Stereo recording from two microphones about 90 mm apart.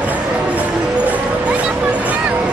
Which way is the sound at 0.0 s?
15° right (ahead or behind).